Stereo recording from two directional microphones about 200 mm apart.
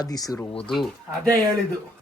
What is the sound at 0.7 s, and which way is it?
Speech, centre (ahead or behind).